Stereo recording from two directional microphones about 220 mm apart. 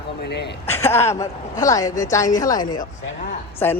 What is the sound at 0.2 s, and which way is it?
Speech, 50° left (ahead or behind).